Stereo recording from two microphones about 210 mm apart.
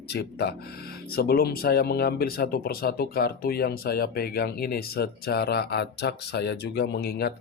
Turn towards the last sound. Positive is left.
turn(degrees=50)  # may be behind; listen again after turning